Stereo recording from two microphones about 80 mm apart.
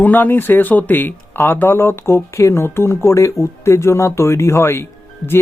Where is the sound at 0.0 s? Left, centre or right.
Left.